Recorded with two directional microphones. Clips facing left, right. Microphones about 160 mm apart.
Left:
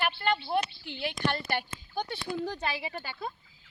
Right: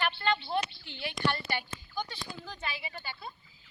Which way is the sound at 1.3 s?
55° left (ahead or behind).